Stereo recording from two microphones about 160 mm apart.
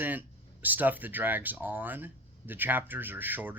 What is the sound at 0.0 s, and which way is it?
Speech, 10° right (ahead or behind).